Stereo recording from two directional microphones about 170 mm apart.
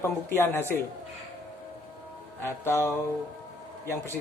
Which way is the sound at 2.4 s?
15° left (ahead or behind).